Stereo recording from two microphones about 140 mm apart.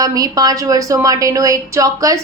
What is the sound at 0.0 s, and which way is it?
A woman's voice, 25° right (ahead or behind).